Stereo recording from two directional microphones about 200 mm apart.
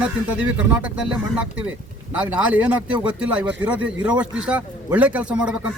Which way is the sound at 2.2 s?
5° right (ahead or behind).